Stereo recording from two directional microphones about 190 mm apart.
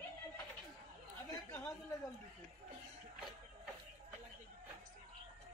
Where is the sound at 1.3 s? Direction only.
15° left (ahead or behind).